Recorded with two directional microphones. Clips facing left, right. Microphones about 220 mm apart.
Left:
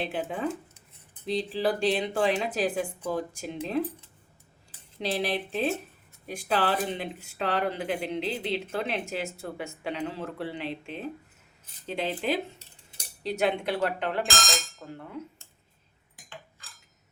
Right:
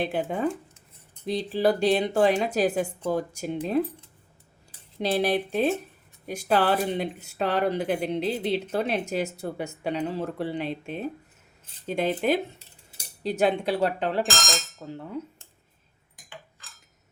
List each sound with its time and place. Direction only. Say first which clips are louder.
0.0 s a woman's voice: right 4 dB; 40° right (ahead or behind)
4.9 s a woman's voice: right 5 dB; 45° right (ahead or behind)